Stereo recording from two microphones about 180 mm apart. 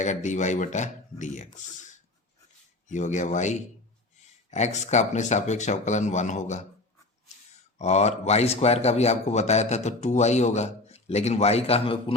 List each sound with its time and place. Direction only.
0.0 s speech: 40° left (ahead or behind)
7.8 s speech: 40° left (ahead or behind)